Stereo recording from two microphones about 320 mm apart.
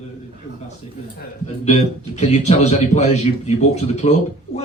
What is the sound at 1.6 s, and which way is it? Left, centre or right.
A man's voice, left.